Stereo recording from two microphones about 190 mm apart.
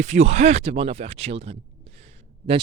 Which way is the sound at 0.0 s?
35° right (ahead or behind).